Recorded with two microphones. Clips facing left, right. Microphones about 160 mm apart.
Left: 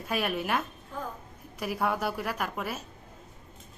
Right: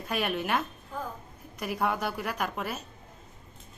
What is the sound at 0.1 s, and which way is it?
Speech, centre (ahead or behind).